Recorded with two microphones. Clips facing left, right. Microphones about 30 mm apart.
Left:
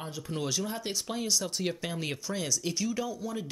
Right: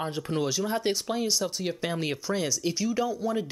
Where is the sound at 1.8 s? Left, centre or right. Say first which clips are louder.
Right 5 dB; centre.